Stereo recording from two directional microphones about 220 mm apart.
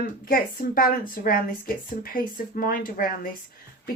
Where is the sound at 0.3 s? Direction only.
40° left (ahead or behind).